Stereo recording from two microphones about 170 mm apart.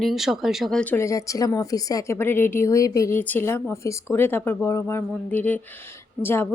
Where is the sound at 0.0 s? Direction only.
Centre (ahead or behind).